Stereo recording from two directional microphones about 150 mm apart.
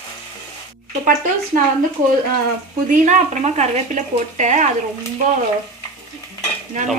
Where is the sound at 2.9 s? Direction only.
55° right (ahead or behind).